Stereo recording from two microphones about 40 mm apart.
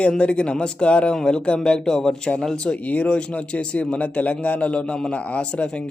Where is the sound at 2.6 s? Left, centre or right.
Left.